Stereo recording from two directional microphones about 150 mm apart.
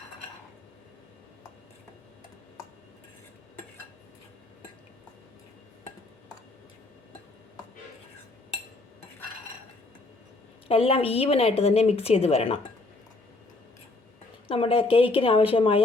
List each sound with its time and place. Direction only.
10.7 s a woman's voice: 40° left (ahead or behind)
14.4 s a woman's voice: 40° left (ahead or behind)